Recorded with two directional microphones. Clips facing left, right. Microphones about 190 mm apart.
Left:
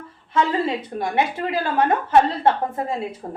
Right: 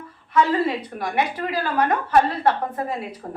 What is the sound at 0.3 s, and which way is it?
A woman's voice, 25° left (ahead or behind).